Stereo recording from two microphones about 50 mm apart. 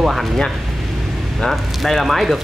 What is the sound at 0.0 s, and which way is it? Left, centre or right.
Speech, centre.